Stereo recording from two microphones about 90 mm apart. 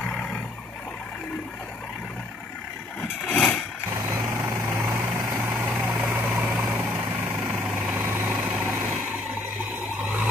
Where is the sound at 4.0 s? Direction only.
35° right (ahead or behind).